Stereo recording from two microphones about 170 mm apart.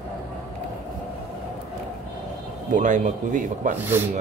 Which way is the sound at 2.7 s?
45° right (ahead or behind).